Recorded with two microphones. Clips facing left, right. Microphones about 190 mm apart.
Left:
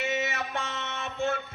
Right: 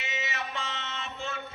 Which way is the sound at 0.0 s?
55° left (ahead or behind).